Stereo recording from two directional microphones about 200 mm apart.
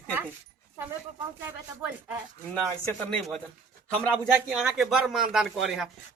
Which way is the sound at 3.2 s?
Centre (ahead or behind).